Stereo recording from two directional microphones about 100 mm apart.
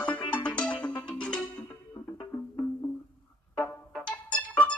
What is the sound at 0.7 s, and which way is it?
Music, 50° left (ahead or behind).